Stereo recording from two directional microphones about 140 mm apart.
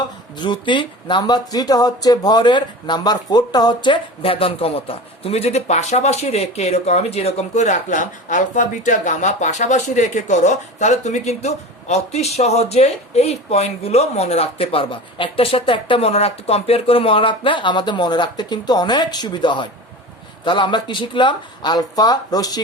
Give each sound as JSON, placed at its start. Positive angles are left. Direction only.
{"t": 0.3, "sound": "speech", "side_deg": 35}